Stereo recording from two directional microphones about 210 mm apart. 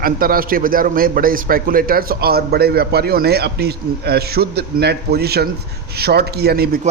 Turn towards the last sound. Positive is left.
turn(degrees=-45)  # may be behind; listen again after turning